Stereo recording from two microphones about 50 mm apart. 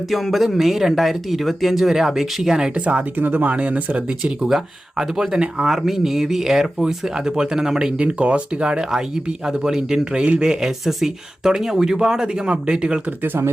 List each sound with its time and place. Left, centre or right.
0.1 s speech: centre
2.7 s speech: right
4.3 s speech: centre
7.9 s speech: right
13.1 s speech: right